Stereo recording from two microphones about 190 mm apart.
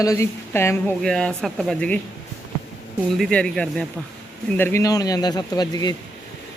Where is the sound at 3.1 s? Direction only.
5° left (ahead or behind).